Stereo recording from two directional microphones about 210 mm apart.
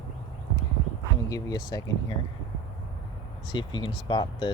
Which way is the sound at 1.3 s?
20° left (ahead or behind).